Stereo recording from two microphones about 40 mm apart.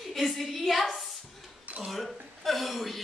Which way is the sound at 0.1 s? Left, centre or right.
Centre.